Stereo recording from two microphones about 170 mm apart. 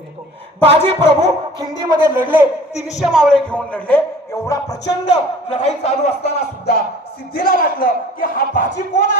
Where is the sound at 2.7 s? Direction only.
40° left (ahead or behind).